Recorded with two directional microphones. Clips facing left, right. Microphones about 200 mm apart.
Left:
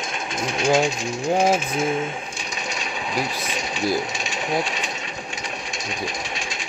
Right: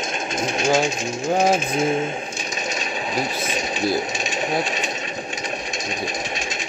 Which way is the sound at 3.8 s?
20° right (ahead or behind).